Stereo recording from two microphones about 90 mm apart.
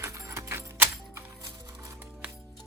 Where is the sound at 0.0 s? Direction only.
30° right (ahead or behind).